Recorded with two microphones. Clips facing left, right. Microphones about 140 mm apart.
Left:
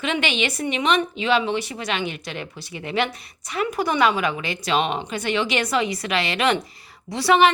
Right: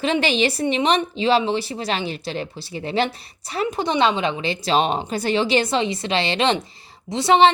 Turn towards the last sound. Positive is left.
turn(degrees=-25)  # may be behind; listen again after turning